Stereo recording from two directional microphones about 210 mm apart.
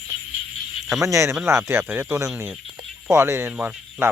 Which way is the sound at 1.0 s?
15° right (ahead or behind).